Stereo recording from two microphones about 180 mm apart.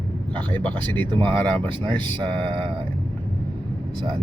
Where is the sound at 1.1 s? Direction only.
25° right (ahead or behind).